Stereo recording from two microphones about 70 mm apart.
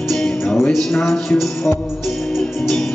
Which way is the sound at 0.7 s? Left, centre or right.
Centre.